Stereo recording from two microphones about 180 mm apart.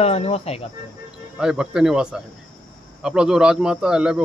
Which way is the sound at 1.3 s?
5° right (ahead or behind).